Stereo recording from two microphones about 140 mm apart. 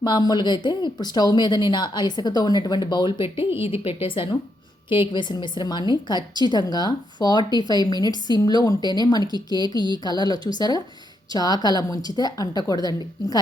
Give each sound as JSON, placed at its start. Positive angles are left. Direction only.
{"t": 0.0, "sound": "a woman's voice", "side_deg": 30}